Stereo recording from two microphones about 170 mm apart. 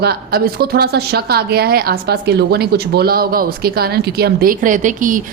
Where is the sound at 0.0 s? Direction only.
65° right (ahead or behind).